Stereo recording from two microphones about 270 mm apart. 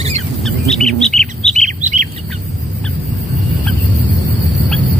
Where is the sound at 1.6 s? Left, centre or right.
Right.